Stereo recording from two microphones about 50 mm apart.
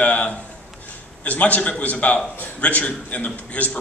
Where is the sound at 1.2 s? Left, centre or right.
Left.